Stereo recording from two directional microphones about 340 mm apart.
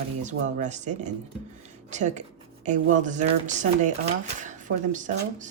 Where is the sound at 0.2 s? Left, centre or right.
Right.